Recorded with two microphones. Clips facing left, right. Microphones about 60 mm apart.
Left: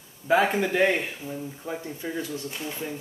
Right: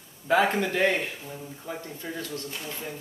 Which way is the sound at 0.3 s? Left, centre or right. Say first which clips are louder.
Left 1 dB; centre.